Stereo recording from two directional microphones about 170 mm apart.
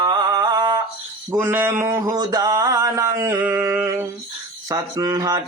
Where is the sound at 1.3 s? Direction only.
15° right (ahead or behind).